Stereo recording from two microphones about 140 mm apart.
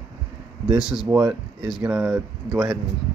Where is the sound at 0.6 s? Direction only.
5° right (ahead or behind).